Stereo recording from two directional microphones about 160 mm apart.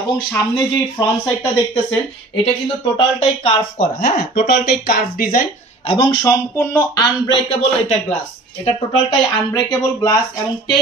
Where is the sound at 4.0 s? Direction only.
80° left; by 5.4 s 65° left (ahead or behind).